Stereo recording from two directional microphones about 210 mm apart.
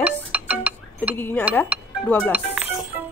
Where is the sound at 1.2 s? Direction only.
10° left (ahead or behind).